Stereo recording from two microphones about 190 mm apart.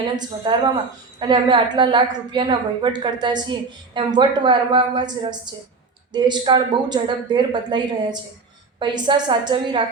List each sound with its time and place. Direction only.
0.0 s a woman's voice: 25° right (ahead or behind)